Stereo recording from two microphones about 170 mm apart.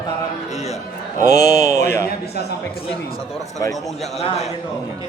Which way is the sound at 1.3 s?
20° left (ahead or behind).